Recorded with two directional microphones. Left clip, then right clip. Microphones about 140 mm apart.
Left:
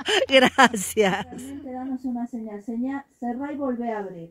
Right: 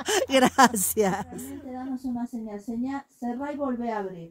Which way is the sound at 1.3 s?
35° right (ahead or behind).